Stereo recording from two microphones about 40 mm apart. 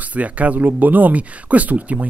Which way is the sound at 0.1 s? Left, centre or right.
Right.